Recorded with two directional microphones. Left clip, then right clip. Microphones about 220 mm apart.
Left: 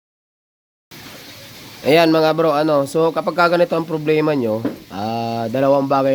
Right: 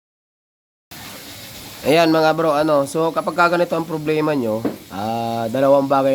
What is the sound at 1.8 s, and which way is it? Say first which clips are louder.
A man's voice: left 1 dB; 10° left (ahead or behind).